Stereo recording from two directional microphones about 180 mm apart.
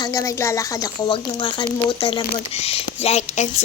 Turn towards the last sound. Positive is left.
turn(degrees=40)  # may be behind; listen again after turning